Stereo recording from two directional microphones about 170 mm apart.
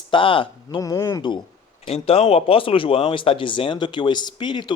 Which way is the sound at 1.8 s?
35° left (ahead or behind).